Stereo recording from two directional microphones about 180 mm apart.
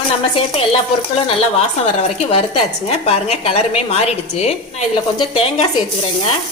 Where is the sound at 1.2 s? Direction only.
35° left (ahead or behind).